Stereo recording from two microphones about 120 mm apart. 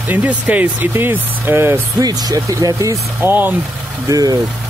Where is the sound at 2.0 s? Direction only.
30° right (ahead or behind).